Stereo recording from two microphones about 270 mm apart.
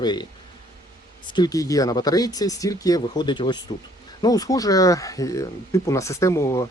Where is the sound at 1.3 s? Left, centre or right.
Centre.